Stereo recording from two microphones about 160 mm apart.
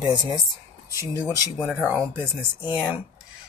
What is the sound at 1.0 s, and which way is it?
Speech, 20° left (ahead or behind).